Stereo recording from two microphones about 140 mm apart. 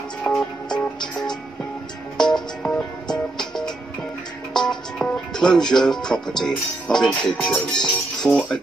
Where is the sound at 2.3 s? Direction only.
30° left (ahead or behind).